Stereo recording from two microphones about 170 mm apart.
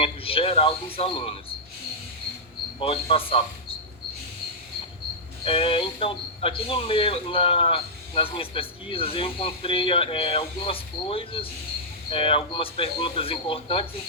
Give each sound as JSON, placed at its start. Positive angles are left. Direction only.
{"t": 0.0, "sound": "speech", "side_deg": 35}
{"t": 2.7, "sound": "speech", "side_deg": 35}
{"t": 5.5, "sound": "speech", "side_deg": 30}